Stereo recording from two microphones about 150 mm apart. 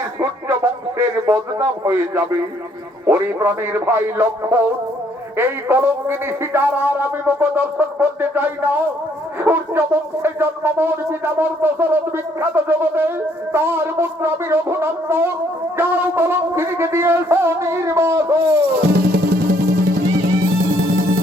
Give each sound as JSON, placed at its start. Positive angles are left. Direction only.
{"t": 0.2, "sound": "speech", "side_deg": -15}
{"t": 18.8, "sound": "music", "side_deg": -90}